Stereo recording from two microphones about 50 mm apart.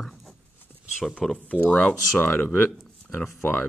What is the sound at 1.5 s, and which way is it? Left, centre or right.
Speech, left.